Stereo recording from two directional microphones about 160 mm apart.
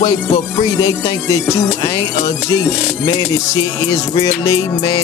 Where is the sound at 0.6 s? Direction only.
20° left (ahead or behind).